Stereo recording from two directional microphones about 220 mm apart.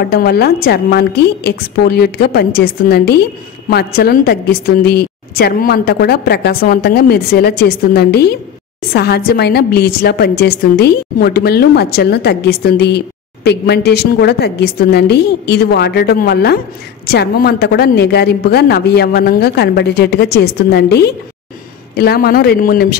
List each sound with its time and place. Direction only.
0.0 s a woman's voice: 45° left (ahead or behind)